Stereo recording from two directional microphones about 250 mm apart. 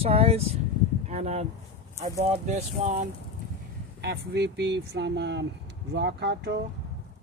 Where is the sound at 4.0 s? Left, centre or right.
Right.